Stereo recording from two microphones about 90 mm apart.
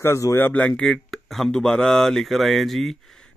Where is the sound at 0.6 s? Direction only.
10° left (ahead or behind).